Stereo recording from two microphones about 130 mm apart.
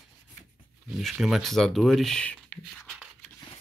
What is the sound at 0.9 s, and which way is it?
Speech, 5° right (ahead or behind).